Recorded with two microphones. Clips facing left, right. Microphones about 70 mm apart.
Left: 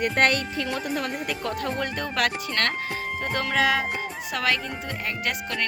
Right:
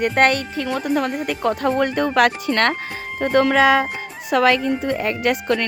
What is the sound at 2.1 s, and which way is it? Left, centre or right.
Speech, right.